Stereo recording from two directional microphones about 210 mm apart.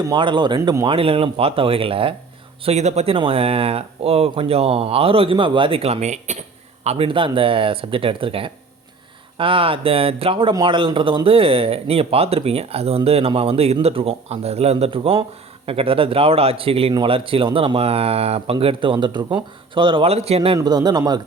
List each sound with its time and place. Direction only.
0.1 s speech: 20° right (ahead or behind)
20.6 s speech: 20° right (ahead or behind)